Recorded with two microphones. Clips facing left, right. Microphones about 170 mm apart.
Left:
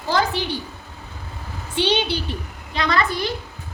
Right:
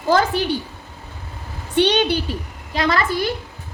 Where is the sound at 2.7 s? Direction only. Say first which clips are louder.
Right 2 dB; 45° right (ahead or behind).